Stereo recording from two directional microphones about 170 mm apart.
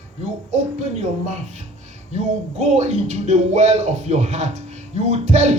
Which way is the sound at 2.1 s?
40° right (ahead or behind).